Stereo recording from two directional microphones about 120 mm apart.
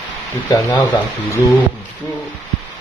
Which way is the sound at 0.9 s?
25° left (ahead or behind).